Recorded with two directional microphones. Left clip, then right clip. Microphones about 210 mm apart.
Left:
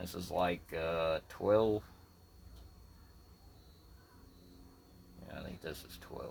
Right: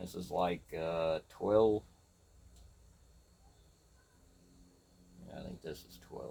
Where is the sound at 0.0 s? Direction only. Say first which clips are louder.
Even; 30° left (ahead or behind).